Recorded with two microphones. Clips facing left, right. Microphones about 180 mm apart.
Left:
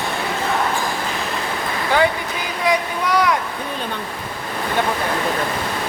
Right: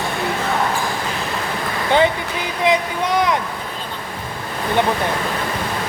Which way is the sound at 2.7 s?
20° right (ahead or behind).